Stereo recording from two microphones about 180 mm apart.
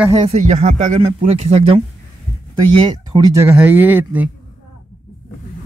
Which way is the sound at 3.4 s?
10° right (ahead or behind).